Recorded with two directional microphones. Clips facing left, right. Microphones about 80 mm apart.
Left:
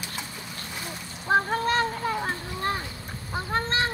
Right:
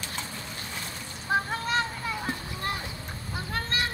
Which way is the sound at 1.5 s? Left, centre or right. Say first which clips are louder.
Left 4 dB; left.